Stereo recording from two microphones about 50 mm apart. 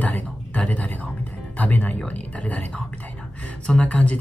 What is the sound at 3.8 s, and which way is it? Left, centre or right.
Speech, left.